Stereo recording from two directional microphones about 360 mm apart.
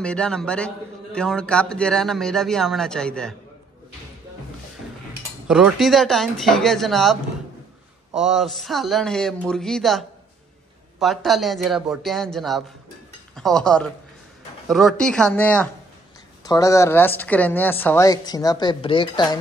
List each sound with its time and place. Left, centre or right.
0.0 s a man's voice: centre
5.5 s a man's voice: centre